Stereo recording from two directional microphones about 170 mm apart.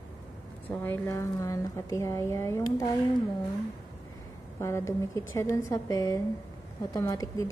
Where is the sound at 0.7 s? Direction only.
10° left (ahead or behind).